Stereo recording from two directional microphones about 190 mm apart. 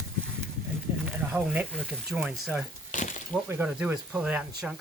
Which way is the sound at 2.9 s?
40° left (ahead or behind).